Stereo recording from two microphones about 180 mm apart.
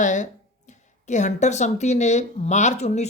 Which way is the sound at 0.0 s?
45° left (ahead or behind).